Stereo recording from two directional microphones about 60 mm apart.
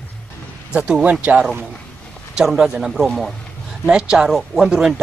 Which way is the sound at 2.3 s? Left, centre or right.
Centre.